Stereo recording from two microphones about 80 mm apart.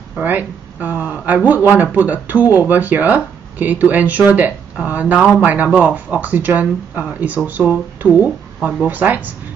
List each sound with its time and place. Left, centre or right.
0.2 s speech: right